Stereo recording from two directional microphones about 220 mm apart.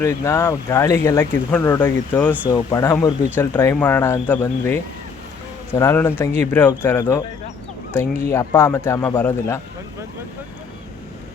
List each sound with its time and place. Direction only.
0.0 s speech: 15° left (ahead or behind)
8.3 s speech: 10° left (ahead or behind)